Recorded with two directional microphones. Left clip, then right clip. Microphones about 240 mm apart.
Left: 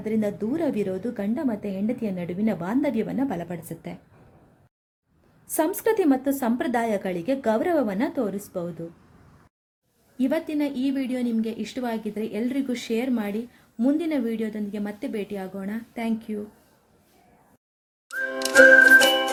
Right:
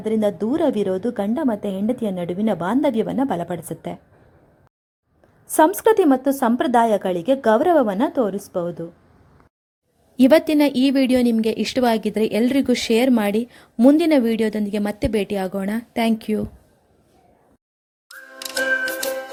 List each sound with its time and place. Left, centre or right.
0.0 s a woman's voice: right
5.5 s a woman's voice: right
10.2 s a woman's voice: right